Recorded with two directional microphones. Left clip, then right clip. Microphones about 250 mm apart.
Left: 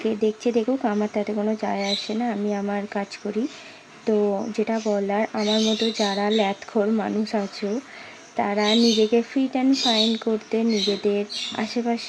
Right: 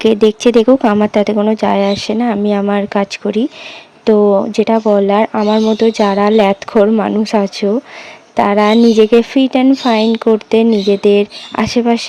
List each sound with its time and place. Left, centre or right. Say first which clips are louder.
0.0 s speech: right 13 dB; right